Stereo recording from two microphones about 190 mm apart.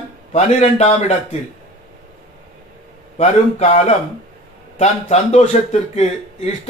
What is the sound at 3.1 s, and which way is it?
A man's voice, 35° left (ahead or behind).